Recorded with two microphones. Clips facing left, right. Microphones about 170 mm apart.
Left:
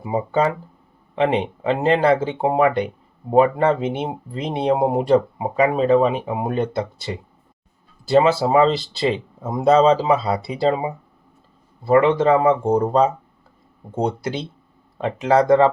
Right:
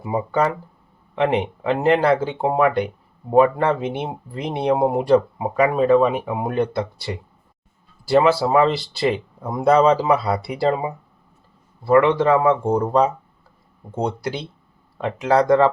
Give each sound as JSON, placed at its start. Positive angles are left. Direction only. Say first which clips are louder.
{"t": 0.0, "sound": "speech", "louder": "left 1 dB", "side_deg": 20}
{"t": 11.9, "sound": "speech", "louder": "even", "side_deg": 20}